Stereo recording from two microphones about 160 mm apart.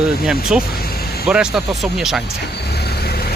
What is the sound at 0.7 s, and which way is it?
Vehicle, 75° left (ahead or behind).